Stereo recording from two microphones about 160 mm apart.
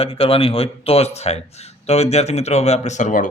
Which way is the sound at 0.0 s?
35° left (ahead or behind).